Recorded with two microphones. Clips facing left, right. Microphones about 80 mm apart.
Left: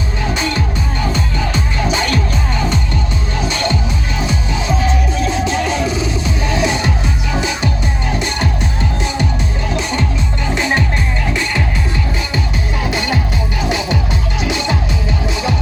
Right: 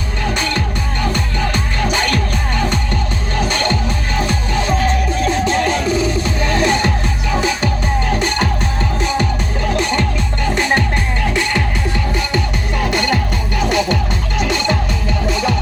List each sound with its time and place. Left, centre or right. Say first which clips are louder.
4.2 s music: right 2 dB; right
13.6 s music: right 4 dB; right